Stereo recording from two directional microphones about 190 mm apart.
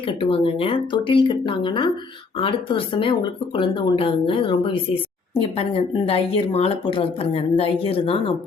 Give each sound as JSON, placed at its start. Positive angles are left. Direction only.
{"t": 0.1, "sound": "speech", "side_deg": 25}